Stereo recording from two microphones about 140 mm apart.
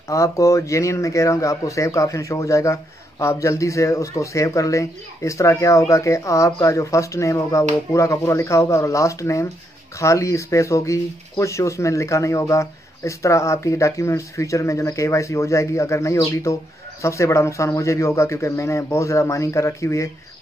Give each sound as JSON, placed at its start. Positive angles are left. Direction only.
{"t": 0.1, "sound": "speech", "side_deg": 20}